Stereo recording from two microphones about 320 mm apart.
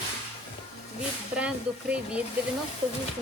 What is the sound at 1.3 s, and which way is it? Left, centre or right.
Speech, centre.